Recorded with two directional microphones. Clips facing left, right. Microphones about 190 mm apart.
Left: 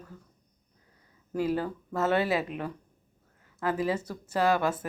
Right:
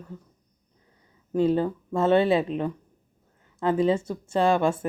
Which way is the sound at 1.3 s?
25° right (ahead or behind).